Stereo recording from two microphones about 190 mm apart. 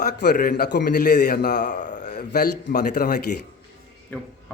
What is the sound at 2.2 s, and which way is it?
Speech, 55° left (ahead or behind).